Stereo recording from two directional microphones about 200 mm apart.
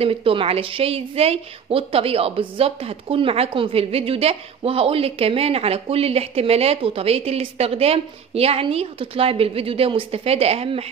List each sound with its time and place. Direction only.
0.0 s a woman's voice: 25° right (ahead or behind)